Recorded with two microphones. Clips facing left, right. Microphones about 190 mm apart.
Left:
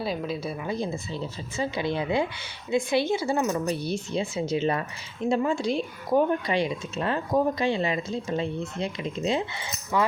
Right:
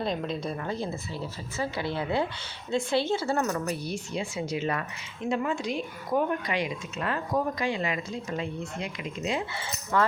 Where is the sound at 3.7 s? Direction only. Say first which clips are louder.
Left 4 dB; 25° left (ahead or behind).